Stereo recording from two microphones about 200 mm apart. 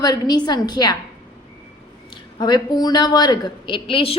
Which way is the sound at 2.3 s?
20° left (ahead or behind).